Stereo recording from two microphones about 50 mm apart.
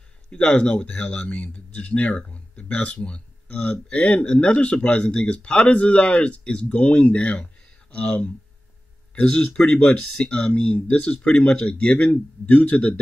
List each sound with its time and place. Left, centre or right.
0.3 s speech: centre
12.1 s speech: left